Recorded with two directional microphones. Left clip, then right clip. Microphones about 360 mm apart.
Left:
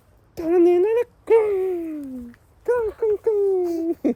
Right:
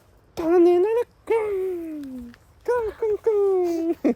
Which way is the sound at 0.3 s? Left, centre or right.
Centre.